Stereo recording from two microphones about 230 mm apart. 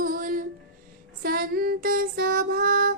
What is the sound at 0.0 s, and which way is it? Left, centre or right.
Music, right.